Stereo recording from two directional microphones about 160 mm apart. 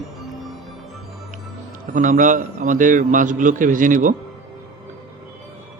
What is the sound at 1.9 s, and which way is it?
A man's voice, 55° right (ahead or behind).